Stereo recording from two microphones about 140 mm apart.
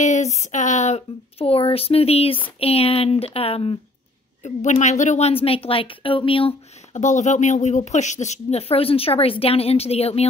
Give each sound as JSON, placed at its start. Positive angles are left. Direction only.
{"t": 0.0, "sound": "speech", "side_deg": 55}
{"t": 4.4, "sound": "speech", "side_deg": 55}
{"t": 5.3, "sound": "speech", "side_deg": 45}
{"t": 6.9, "sound": "speech", "side_deg": 60}